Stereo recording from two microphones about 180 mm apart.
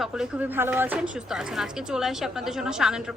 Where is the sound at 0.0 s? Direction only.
5° right (ahead or behind).